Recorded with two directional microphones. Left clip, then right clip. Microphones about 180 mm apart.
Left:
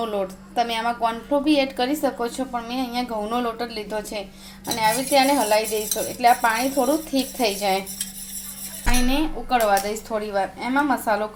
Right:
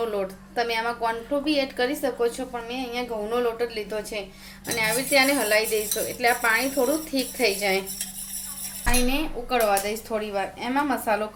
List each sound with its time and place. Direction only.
0.0 s a woman's voice: 5° left (ahead or behind)
9.0 s speech: 5° left (ahead or behind)